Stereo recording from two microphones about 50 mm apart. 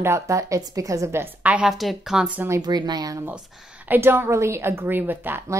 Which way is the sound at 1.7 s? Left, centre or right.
Centre.